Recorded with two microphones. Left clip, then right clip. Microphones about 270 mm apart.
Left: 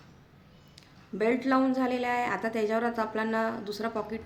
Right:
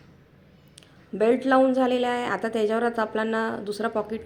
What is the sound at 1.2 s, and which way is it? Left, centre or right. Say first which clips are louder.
A woman's voice: right 7 dB; centre.